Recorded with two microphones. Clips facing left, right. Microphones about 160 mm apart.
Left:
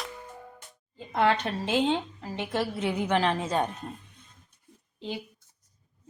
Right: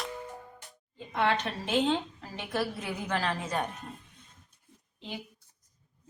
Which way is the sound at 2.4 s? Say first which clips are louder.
Left 3 dB; 25° left (ahead or behind).